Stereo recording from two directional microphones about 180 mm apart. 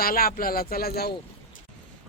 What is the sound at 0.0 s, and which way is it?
Speech, 55° left (ahead or behind).